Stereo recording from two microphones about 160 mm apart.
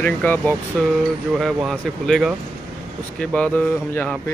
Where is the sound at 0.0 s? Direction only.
10° left (ahead or behind).